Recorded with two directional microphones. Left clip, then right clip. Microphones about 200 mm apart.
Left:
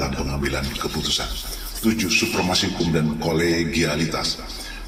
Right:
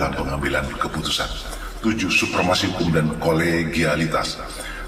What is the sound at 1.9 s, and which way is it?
A man's voice, 35° left (ahead or behind).